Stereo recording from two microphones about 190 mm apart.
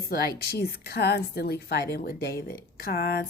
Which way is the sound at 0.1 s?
55° left (ahead or behind).